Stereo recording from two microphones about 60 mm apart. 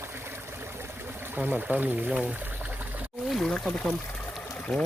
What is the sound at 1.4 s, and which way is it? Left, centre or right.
Speech, right.